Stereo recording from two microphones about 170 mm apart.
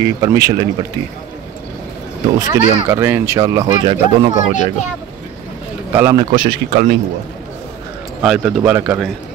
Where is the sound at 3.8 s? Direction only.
35° right (ahead or behind).